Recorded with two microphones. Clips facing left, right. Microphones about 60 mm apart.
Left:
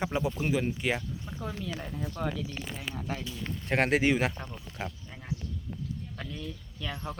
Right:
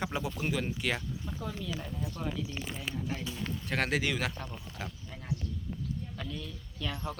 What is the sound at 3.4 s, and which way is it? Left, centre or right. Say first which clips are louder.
Speech: left 6 dB; left.